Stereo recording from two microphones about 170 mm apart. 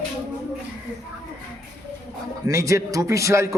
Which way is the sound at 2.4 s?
20° right (ahead or behind).